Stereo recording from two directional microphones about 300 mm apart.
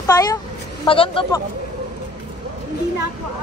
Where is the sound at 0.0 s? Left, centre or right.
Centre.